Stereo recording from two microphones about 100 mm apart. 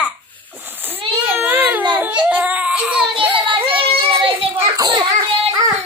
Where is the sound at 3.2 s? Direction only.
15° right (ahead or behind).